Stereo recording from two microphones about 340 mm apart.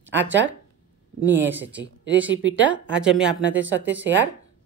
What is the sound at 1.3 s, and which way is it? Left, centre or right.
Speech, centre.